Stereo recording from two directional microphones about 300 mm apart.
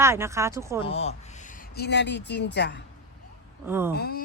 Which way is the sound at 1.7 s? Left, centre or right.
Left.